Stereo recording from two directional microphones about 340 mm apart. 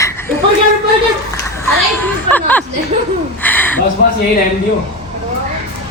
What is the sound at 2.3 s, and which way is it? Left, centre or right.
Speech, centre.